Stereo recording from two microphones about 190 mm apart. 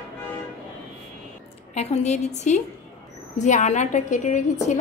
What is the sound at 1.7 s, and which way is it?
A woman's voice, 35° left (ahead or behind).